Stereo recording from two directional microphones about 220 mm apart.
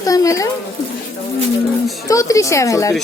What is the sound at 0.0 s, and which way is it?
Speech, 15° left (ahead or behind).